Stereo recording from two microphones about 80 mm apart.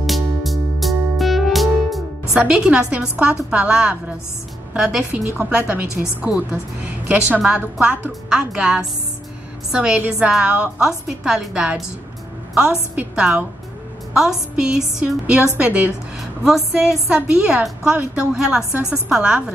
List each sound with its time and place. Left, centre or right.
0.0 s music: centre
2.3 s a woman's voice: centre
12.9 s a woman's voice: centre
14.5 s a woman's voice: centre
16.2 s a woman's voice: centre